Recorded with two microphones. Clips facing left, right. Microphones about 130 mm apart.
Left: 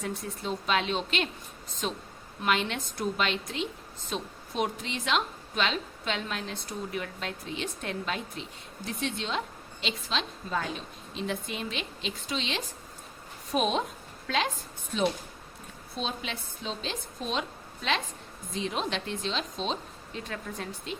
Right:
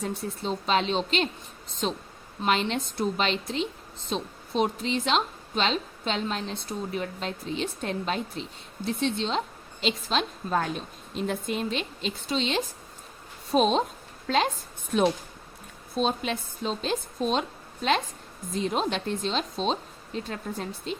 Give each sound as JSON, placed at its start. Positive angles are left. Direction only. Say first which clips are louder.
{"t": 0.2, "sound": "a woman's voice", "louder": "right 3 dB", "side_deg": -30}
{"t": 9.8, "sound": "a woman's voice", "louder": "right 6 dB", "side_deg": -45}
{"t": 14.9, "sound": "a woman's voice", "louder": "right 5 dB", "side_deg": -50}
{"t": 18.5, "sound": "a woman's voice", "louder": "right 4 dB", "side_deg": -40}